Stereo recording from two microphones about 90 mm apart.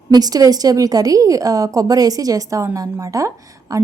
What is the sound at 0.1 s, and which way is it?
A woman's voice, 45° right (ahead or behind).